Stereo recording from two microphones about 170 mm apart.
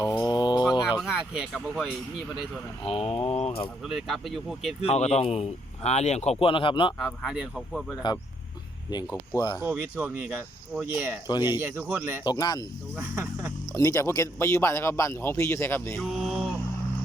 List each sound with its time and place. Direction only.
0.0 s a sound: 20° left (ahead or behind)
0.6 s a sound: 5° right (ahead or behind)
1.6 s speech: centre (ahead or behind)
2.8 s speech: 35° left (ahead or behind)
3.8 s speech: centre (ahead or behind)
4.8 s speech: 40° left (ahead or behind)
7.0 s speech: centre (ahead or behind)
9.3 s speech: 20° left (ahead or behind)
9.6 s speech: 15° right (ahead or behind)
12.2 s speech: 25° left (ahead or behind)
13.0 s speech: 10° right (ahead or behind)
13.7 s speech: 15° left (ahead or behind)
16.2 s vehicle: centre (ahead or behind)